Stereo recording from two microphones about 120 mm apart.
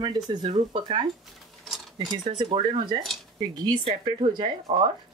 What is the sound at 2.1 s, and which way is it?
Speech, 40° right (ahead or behind).